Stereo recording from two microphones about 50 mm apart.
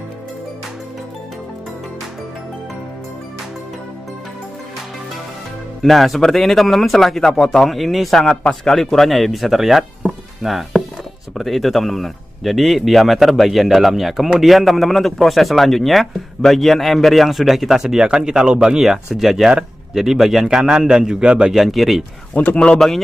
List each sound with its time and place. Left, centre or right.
5.8 s speech: centre
21.5 s speech: centre
22.3 s speech: left